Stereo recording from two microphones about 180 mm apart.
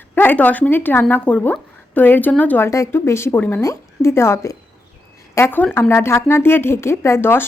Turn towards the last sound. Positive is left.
turn(degrees=10)  # may be behind; listen again after turning